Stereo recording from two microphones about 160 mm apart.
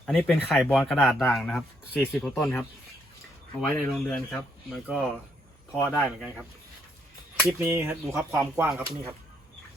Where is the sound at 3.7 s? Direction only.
10° left (ahead or behind).